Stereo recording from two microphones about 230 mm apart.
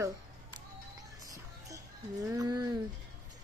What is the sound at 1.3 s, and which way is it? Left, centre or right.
Music, centre.